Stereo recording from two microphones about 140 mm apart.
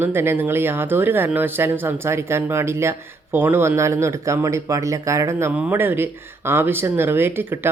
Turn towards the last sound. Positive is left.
turn(degrees=-15)  # may be behind; listen again after turning